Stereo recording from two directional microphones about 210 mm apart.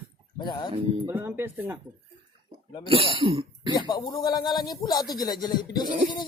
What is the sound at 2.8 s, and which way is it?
Speech, 25° right (ahead or behind).